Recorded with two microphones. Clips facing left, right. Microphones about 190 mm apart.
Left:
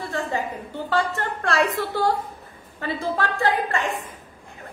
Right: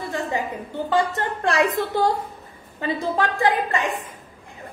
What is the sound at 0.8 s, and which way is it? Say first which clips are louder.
A woman's voice: right 2 dB; 20° right (ahead or behind).